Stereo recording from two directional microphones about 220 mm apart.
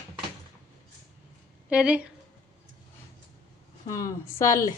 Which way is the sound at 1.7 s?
5° right (ahead or behind).